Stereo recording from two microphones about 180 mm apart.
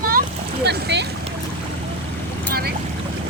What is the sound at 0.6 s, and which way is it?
Speech, 70° right (ahead or behind).